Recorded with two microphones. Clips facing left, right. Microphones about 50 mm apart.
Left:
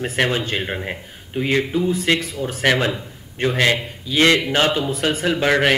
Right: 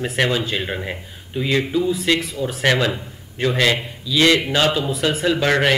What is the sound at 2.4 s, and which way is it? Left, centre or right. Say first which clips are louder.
Speech: right 1 dB; left.